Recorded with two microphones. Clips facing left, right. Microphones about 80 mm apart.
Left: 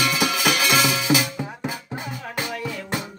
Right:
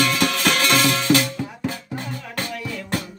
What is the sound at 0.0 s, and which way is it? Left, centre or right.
Music, centre.